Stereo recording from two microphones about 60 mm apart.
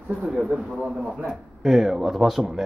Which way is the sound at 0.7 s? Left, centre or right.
Centre.